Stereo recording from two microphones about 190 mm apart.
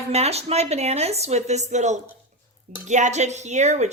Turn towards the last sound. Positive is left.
turn(degrees=-35)  # may be behind; listen again after turning